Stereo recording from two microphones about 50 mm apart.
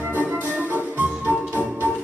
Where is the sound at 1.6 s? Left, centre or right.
Left.